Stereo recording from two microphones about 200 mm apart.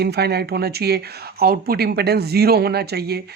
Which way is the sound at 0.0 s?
55° right (ahead or behind).